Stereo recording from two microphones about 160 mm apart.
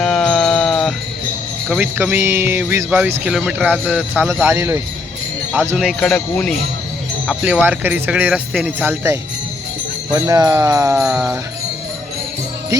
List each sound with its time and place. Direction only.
0.0 s a sound: 5° left (ahead or behind)
1.8 s speech: 10° right (ahead or behind)
5.7 s speech: centre (ahead or behind)
7.3 s speech: 5° right (ahead or behind)
10.2 s speech: 25° right (ahead or behind)